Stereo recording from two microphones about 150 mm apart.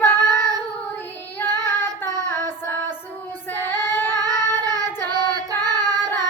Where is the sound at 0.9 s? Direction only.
15° left (ahead or behind).